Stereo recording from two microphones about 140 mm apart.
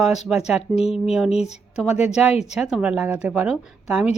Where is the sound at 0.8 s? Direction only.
45° left (ahead or behind).